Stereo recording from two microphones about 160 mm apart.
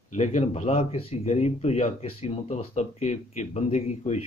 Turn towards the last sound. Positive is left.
turn(degrees=45)  # may be behind; listen again after turning